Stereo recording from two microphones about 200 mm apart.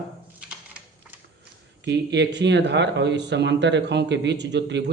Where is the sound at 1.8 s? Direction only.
60° right (ahead or behind).